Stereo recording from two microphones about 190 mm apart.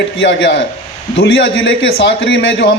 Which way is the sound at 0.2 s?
75° left (ahead or behind).